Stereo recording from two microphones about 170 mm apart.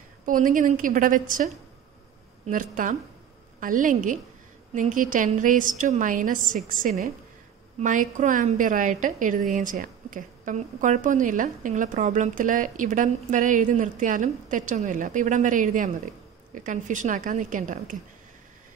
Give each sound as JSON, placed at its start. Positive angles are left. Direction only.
{"t": 0.2, "sound": "a woman's voice", "side_deg": -50}